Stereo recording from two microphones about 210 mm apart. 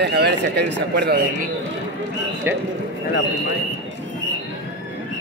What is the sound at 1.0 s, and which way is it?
Speech, 50° right (ahead or behind).